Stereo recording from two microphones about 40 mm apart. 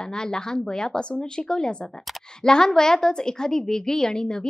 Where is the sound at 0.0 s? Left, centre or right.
Centre.